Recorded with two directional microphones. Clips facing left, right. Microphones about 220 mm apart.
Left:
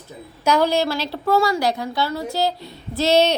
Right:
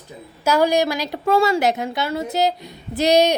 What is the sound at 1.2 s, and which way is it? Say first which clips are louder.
A woman's voice: right 2 dB; 25° right (ahead or behind).